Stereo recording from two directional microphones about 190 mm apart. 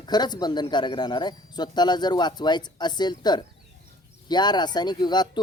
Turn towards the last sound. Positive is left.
turn(degrees=20)  # may be behind; listen again after turning